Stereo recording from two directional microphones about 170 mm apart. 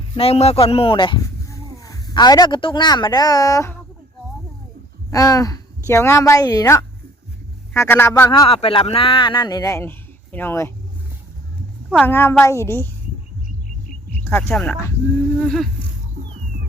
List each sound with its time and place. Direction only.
0.2 s speech: 35° left (ahead or behind); by 3.8 s 20° left (ahead or behind)
5.1 s a woman's voice: 20° left (ahead or behind)
8.3 s a woman's voice: 35° left (ahead or behind); by 10.7 s 15° left (ahead or behind)
11.9 s a woman's voice: 10° left (ahead or behind)
14.3 s a woman's voice: 10° left (ahead or behind)
15.4 s a sound: centre (ahead or behind)